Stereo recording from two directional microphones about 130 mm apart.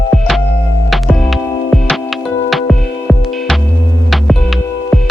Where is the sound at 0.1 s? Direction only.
Centre (ahead or behind).